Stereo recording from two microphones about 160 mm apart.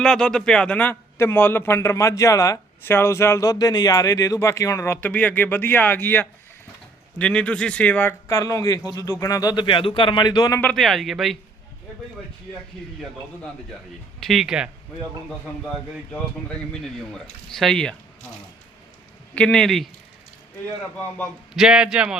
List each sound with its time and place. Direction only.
0.0 s a man's voice: 5° left (ahead or behind)
8.3 s speech: 20° left (ahead or behind)
10.6 s speech: 5° left (ahead or behind)
14.2 s speech: centre (ahead or behind)
16.7 s speech: 5° left (ahead or behind)
19.3 s speech: 5° left (ahead or behind)
21.5 s speech: 5° right (ahead or behind)